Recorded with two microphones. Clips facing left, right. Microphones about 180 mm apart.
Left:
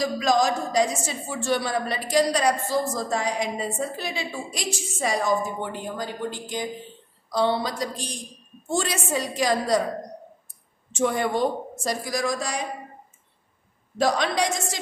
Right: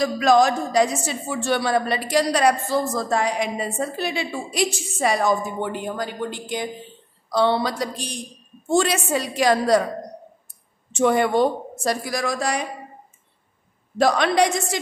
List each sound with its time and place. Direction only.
0.0 s a woman's voice: 65° right (ahead or behind)
7.2 s a woman's voice: 70° right (ahead or behind)
10.9 s a woman's voice: 70° right (ahead or behind)
13.9 s a woman's voice: 65° right (ahead or behind)